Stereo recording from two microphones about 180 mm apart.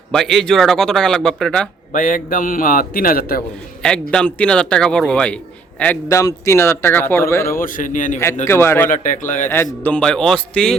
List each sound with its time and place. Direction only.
0.1 s speech: centre (ahead or behind)
1.9 s a man's voice: 50° left (ahead or behind)
4.1 s a man's voice: 5° left (ahead or behind)
7.6 s a man's voice: 45° left (ahead or behind)
8.4 s a man's voice: 15° left (ahead or behind)
8.9 s a man's voice: 45° left (ahead or behind)
9.5 s speech: 10° left (ahead or behind)